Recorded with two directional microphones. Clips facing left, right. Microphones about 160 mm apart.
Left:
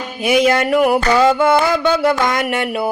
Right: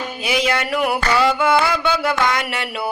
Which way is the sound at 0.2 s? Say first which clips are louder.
Left 7 dB; 50° left (ahead or behind).